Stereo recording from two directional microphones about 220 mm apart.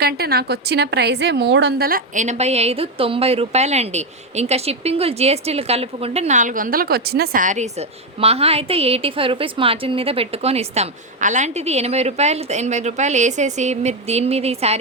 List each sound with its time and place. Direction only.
0.0 s a woman's voice: 45° right (ahead or behind); by 14.8 s 30° right (ahead or behind)